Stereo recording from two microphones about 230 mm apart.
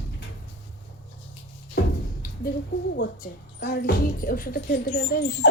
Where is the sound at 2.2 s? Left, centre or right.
Left.